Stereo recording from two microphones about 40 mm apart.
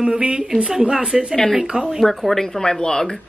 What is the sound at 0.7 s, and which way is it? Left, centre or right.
Speech, centre.